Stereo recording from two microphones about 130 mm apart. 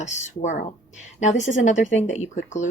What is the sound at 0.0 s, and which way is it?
A woman's voice, 65° left (ahead or behind).